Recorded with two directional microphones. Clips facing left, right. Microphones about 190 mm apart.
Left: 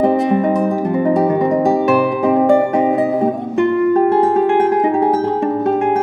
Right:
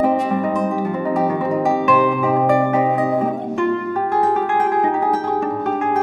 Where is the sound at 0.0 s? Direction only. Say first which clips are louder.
Left 4 dB; 35° left (ahead or behind).